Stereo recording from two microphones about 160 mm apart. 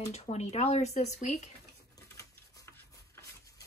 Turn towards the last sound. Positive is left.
turn(degrees=20)  # may be behind; listen again after turning